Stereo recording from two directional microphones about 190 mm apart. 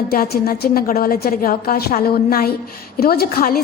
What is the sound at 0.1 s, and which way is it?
A woman's voice, 50° left (ahead or behind).